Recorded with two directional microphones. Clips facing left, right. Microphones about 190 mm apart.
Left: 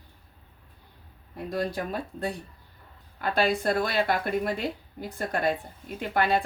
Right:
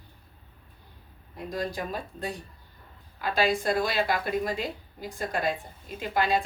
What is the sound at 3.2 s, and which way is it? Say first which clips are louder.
A woman's voice: left 1 dB; 55° left (ahead or behind).